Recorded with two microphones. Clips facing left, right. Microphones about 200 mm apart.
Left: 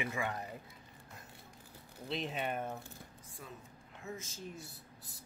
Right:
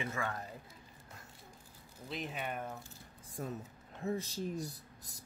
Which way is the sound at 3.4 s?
45° right (ahead or behind).